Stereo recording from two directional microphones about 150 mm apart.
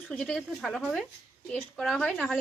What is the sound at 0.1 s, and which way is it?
Speech, 5° left (ahead or behind).